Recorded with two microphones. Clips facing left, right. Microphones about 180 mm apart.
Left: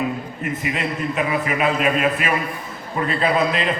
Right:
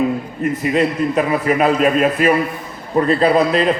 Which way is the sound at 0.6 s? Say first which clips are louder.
Right 9 dB; 40° right (ahead or behind).